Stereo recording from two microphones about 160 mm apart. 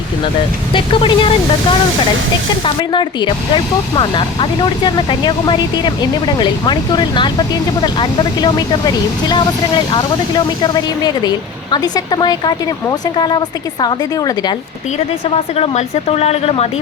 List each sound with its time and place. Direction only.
0.7 s speech: 30° left (ahead or behind)
2.6 s speech: 30° left (ahead or behind)
15.5 s speech: 40° left (ahead or behind)